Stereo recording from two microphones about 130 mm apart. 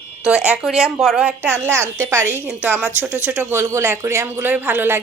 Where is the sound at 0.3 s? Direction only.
10° right (ahead or behind).